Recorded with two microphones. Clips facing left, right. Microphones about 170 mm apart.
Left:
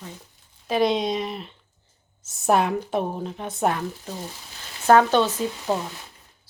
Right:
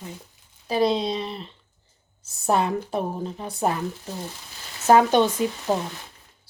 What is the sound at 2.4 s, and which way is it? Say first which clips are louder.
Speech: left 2 dB; centre (ahead or behind).